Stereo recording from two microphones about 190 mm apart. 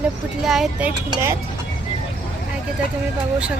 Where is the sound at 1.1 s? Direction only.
15° right (ahead or behind).